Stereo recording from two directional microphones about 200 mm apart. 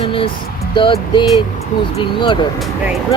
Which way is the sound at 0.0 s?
25° left (ahead or behind).